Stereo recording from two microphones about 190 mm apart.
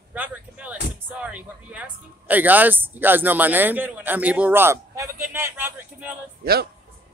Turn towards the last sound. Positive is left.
turn(degrees=-55)  # may be behind; listen again after turning